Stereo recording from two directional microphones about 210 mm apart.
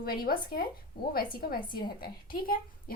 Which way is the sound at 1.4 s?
45° left (ahead or behind).